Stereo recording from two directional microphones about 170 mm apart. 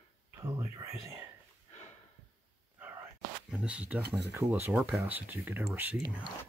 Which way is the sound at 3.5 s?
5° right (ahead or behind).